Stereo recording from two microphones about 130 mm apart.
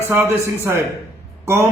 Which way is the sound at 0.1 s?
20° right (ahead or behind).